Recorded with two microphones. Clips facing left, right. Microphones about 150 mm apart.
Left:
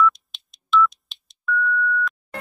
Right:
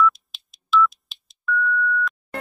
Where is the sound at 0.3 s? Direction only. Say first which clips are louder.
Even; centre (ahead or behind).